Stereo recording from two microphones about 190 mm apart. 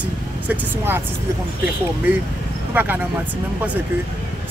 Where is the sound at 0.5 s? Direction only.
10° right (ahead or behind).